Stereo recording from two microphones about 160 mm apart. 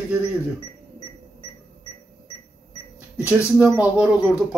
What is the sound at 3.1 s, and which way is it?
Speech, 5° right (ahead or behind).